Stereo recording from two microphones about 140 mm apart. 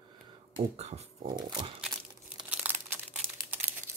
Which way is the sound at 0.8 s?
50° right (ahead or behind).